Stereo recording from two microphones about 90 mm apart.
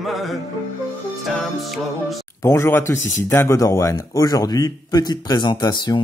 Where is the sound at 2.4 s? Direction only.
30° left (ahead or behind).